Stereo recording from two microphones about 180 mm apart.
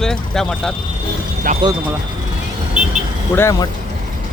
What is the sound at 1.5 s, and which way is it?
Speech, 45° right (ahead or behind).